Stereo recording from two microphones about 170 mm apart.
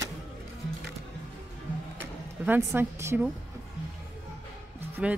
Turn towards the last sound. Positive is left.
turn(degrees=-5)  # may be behind; listen again after turning